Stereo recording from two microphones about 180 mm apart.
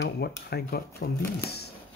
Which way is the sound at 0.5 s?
60° left (ahead or behind).